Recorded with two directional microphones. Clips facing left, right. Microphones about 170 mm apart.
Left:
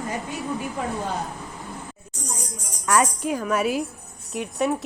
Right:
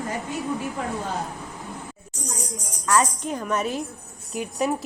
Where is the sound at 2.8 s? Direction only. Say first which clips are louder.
Left 1 dB; 15° left (ahead or behind).